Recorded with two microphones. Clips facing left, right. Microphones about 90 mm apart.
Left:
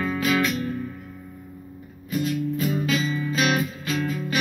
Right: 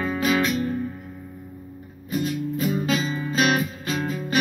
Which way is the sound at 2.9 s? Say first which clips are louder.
Even; 35° right (ahead or behind).